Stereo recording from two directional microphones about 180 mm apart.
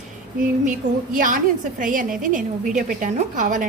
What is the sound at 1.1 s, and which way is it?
A woman's voice, 50° right (ahead or behind).